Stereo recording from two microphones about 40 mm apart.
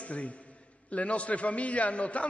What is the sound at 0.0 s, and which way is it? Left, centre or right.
A man's voice, left.